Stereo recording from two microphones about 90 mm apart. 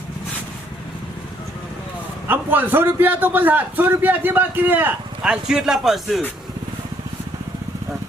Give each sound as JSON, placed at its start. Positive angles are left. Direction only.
{"t": 2.2, "sound": "a man's voice", "side_deg": -20}
{"t": 5.2, "sound": "a man's voice", "side_deg": -10}